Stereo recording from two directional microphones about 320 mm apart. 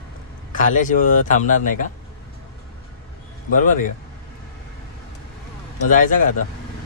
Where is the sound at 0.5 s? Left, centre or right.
Left.